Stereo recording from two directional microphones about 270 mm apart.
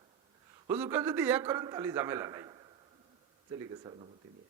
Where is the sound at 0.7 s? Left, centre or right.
Centre.